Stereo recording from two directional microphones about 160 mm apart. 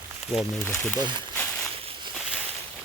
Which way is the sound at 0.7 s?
10° left (ahead or behind).